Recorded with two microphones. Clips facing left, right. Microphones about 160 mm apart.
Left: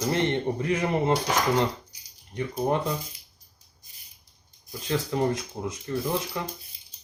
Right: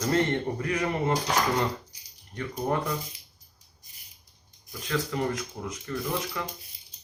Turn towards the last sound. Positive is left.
turn(degrees=25)  # may be behind; listen again after turning